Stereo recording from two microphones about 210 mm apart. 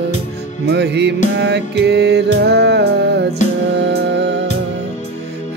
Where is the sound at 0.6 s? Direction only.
55° right (ahead or behind).